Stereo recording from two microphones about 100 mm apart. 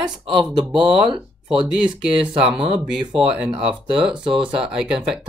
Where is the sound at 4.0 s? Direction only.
10° right (ahead or behind).